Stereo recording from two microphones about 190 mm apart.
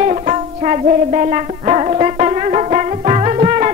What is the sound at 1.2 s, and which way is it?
Music, 35° right (ahead or behind).